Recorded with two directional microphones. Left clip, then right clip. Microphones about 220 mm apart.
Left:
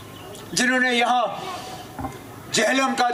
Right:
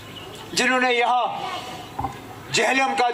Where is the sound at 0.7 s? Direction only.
50° left (ahead or behind).